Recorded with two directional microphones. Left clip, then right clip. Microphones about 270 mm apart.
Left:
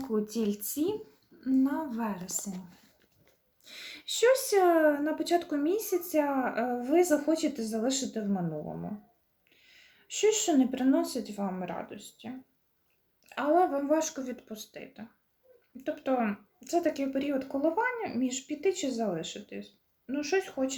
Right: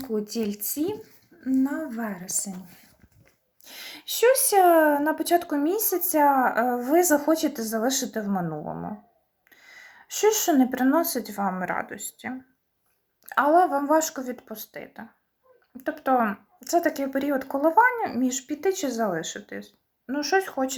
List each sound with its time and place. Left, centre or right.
0.0 s speech: centre
3.6 s speech: centre
9.6 s speech: centre
13.2 s speech: centre